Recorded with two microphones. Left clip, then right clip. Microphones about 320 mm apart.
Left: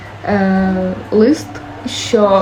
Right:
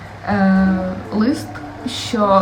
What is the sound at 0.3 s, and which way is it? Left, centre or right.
Speech, centre.